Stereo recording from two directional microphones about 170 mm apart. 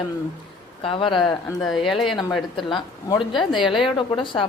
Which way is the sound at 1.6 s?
Centre (ahead or behind).